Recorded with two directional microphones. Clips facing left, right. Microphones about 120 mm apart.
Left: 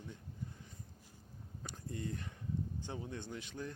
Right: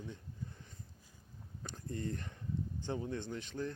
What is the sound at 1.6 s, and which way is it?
Speech, 10° left (ahead or behind).